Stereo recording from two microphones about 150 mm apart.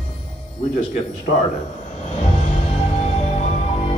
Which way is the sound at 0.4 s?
35° left (ahead or behind).